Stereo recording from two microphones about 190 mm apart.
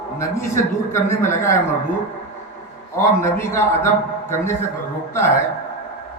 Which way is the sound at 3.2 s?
15° left (ahead or behind).